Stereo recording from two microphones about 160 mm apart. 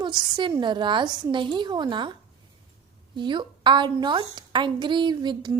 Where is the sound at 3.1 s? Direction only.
30° right (ahead or behind).